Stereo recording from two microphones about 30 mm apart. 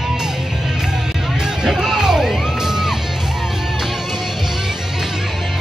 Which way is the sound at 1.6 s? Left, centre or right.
Centre.